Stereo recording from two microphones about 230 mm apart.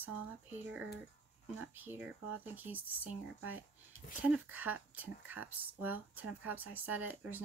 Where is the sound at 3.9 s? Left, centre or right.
Left.